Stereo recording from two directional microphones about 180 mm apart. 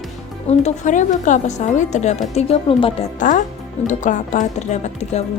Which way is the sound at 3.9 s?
45° left (ahead or behind).